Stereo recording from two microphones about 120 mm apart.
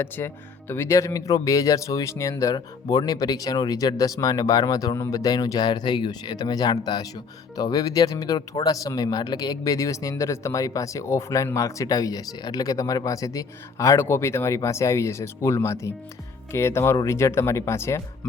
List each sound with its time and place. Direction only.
0.2 s speech: 20° left (ahead or behind)